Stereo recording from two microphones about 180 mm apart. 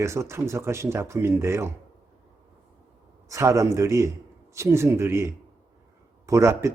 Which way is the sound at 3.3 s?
15° right (ahead or behind).